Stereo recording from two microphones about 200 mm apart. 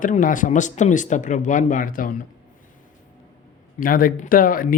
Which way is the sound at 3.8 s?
45° left (ahead or behind).